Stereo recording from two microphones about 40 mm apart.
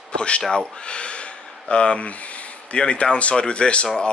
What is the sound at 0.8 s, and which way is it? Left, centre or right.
Speech, left.